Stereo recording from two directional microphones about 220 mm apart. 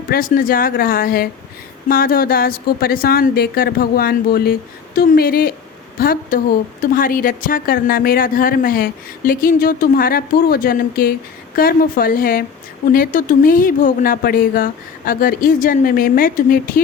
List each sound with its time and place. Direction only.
0.1 s a woman's voice: 40° left (ahead or behind)